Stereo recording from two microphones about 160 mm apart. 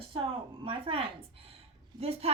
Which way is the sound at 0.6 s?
35° right (ahead or behind).